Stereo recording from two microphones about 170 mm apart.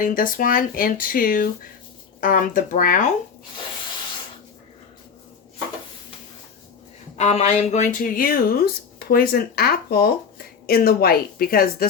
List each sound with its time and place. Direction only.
0.0 s speech: 55° left (ahead or behind)
7.2 s speech: 40° left (ahead or behind); by 11.9 s 60° left (ahead or behind)